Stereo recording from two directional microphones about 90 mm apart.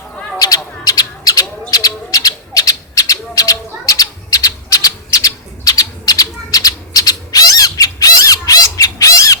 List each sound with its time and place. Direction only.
0.3 s bird: 45° left (ahead or behind)